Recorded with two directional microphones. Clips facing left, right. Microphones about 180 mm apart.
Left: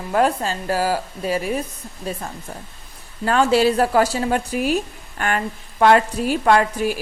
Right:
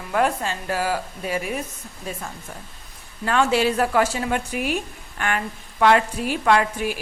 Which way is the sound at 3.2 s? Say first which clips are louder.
Left 3 dB; 35° left (ahead or behind).